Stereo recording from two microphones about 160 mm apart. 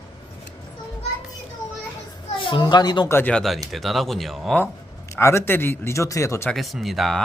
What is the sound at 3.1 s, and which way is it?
Speech, 10° left (ahead or behind).